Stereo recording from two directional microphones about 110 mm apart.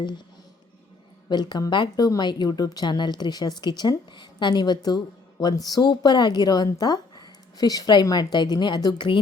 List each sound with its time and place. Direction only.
1.3 s a woman's voice: 40° left (ahead or behind)